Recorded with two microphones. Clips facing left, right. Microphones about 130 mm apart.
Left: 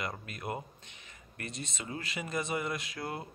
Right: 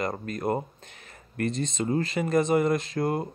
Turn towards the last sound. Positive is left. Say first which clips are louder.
# right 12 dB
turn(degrees=-45)  # may be behind; listen again after turning